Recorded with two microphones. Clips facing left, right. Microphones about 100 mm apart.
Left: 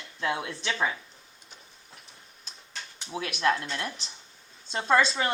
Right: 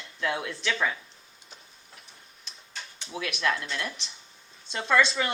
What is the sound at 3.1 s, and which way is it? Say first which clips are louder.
A woman's voice: left 2 dB; 30° left (ahead or behind).